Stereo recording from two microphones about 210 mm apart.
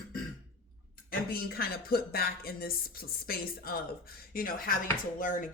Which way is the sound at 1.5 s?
45° left (ahead or behind).